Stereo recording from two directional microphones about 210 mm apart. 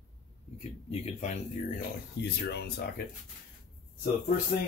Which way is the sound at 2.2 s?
50° left (ahead or behind).